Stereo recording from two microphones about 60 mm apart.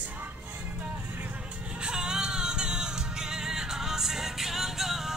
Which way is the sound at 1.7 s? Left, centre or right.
Centre.